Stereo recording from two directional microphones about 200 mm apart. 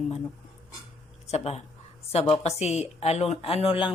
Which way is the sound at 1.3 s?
30° left (ahead or behind).